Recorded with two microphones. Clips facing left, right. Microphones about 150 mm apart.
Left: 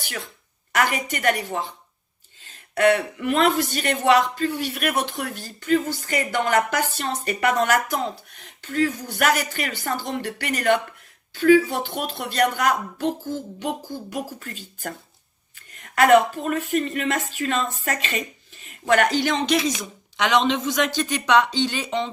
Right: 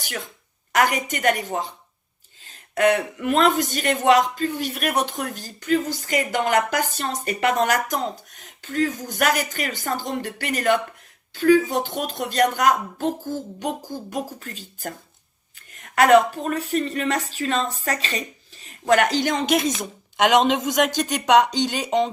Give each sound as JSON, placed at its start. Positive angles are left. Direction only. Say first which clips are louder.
{"t": 0.7, "sound": "a woman's voice", "louder": "right 2 dB", "side_deg": -45}
{"t": 6.0, "sound": "speech", "louder": "right 1 dB", "side_deg": 40}
{"t": 6.7, "sound": "a woman's voice", "louder": "even", "side_deg": -40}
{"t": 16.0, "sound": "a woman's voice", "louder": "even", "side_deg": -40}